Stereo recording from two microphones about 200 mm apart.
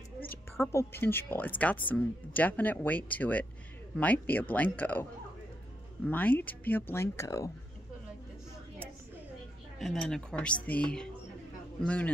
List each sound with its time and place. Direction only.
0.7 s speech: 10° left (ahead or behind)
6.0 s speech: 10° left (ahead or behind)
9.8 s speech: centre (ahead or behind)